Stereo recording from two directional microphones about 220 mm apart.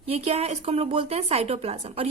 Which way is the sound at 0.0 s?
25° right (ahead or behind).